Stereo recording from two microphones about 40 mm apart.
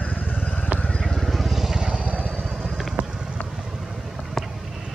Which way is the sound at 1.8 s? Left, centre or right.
Right.